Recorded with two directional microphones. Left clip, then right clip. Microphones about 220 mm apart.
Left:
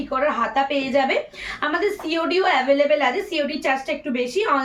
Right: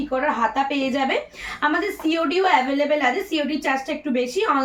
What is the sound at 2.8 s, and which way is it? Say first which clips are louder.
A woman's voice: left 1 dB; 15° left (ahead or behind).